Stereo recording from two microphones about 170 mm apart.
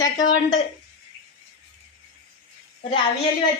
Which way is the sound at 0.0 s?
20° left (ahead or behind).